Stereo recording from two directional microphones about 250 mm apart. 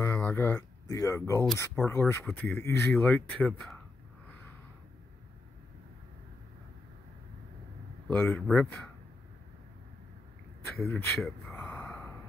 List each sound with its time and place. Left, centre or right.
0.0 s speech: centre
8.1 s speech: centre
10.9 s a sound: centre